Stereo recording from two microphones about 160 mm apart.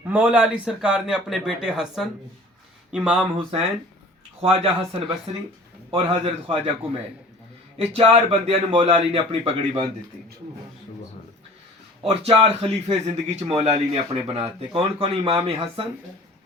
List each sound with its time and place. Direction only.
0.1 s speech: 10° right (ahead or behind)
4.4 s a man's voice: 35° right (ahead or behind)
7.8 s a man's voice: 40° right (ahead or behind)
12.0 s a man's voice: 40° right (ahead or behind)